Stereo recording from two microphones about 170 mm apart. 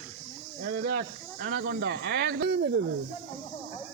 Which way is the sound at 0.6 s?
60° right (ahead or behind).